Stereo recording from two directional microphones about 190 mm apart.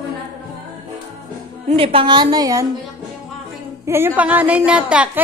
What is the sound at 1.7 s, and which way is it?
Speech, 30° right (ahead or behind).